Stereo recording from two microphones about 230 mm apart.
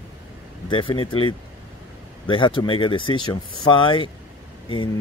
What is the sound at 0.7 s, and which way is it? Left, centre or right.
Speech, left.